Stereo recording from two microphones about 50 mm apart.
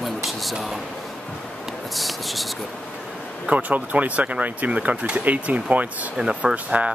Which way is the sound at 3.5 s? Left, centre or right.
Right.